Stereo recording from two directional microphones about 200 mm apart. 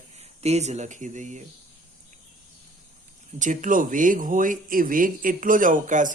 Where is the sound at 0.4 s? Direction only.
35° right (ahead or behind).